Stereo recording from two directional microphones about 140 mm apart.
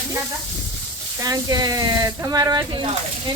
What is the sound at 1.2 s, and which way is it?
Speech, 25° right (ahead or behind).